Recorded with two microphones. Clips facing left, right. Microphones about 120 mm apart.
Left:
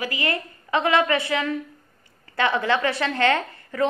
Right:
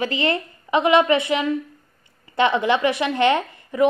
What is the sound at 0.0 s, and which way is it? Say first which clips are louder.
A woman's voice: right 5 dB; 25° right (ahead or behind).